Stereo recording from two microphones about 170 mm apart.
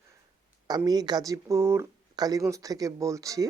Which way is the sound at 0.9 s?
25° right (ahead or behind).